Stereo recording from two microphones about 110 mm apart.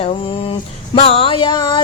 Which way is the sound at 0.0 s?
60° left (ahead or behind).